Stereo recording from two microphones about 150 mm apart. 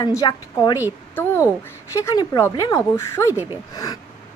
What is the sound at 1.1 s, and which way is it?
Speech, 15° left (ahead or behind).